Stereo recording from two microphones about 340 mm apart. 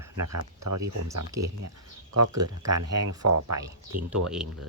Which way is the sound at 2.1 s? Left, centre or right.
Right.